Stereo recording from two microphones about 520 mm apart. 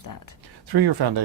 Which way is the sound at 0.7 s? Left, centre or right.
Right.